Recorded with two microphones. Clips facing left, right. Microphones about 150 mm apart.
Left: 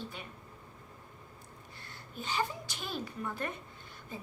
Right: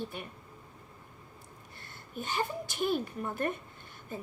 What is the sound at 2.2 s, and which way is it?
A child's voice, 55° right (ahead or behind).